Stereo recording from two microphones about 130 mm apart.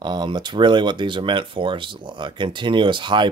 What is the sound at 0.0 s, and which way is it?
A man's voice, 35° right (ahead or behind).